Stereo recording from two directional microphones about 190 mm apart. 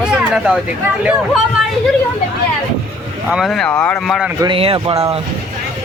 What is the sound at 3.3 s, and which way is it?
Speech, centre (ahead or behind).